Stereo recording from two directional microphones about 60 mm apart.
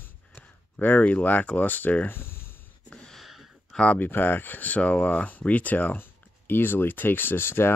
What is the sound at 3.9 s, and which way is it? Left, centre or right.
Speech, left.